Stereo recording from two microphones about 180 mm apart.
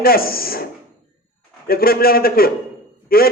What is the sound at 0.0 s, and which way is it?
A man's voice, 55° left (ahead or behind).